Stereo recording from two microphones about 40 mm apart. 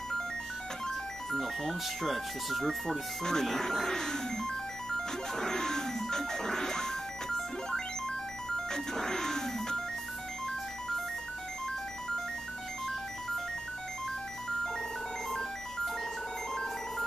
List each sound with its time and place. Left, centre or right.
0.8 s speech: centre
4.9 s music: centre
8.5 s speech: centre